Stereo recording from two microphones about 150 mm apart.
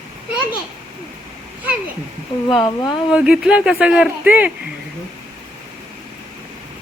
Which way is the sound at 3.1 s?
5° right (ahead or behind).